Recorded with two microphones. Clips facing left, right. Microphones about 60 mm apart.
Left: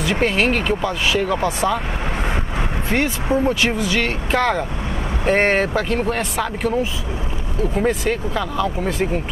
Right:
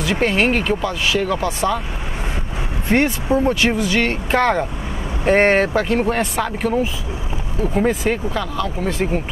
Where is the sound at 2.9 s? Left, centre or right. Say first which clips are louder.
Right 4 dB; centre.